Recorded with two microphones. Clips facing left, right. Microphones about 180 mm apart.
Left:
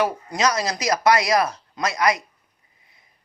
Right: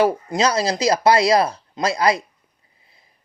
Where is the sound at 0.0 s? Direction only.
30° right (ahead or behind).